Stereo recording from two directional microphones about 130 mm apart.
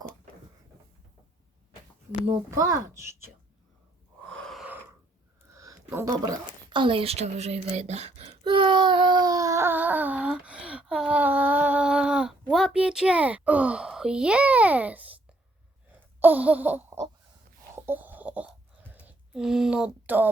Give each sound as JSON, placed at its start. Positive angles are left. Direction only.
{"t": 2.6, "sound": "speech", "side_deg": -25}
{"t": 4.3, "sound": "gasp", "side_deg": 5}
{"t": 5.9, "sound": "a woman's voice", "side_deg": -20}
{"t": 8.4, "sound": "speech", "side_deg": -35}
{"t": 16.0, "sound": "a sound", "side_deg": -15}